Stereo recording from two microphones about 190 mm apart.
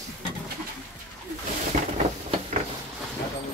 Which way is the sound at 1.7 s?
40° right (ahead or behind).